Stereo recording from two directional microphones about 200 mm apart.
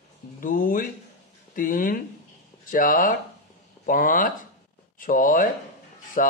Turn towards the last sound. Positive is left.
turn(degrees=45)  # may be behind; listen again after turning